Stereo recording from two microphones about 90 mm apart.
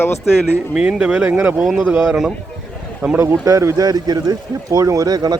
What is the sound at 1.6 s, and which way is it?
Speech, 5° right (ahead or behind).